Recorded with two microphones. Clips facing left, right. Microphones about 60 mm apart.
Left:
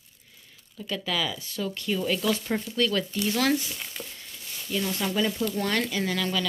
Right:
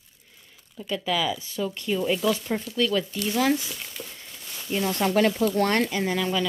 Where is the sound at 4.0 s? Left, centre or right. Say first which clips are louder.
Right 1 dB; centre.